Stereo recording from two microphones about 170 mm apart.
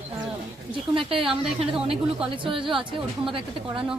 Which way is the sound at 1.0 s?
30° right (ahead or behind).